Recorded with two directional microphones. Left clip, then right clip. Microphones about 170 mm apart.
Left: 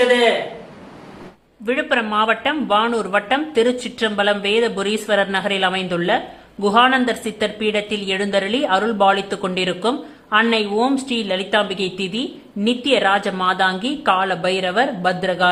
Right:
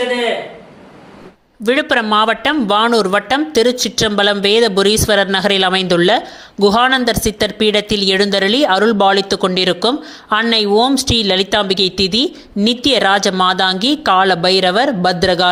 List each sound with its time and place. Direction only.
1.6 s speech: 40° right (ahead or behind)